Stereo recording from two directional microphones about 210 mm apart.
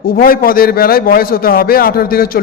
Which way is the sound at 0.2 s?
45° left (ahead or behind).